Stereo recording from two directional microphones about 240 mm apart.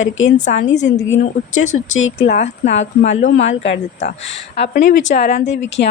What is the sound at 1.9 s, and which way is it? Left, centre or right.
Speech, left.